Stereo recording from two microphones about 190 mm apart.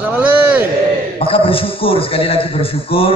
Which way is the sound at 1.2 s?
30° left (ahead or behind).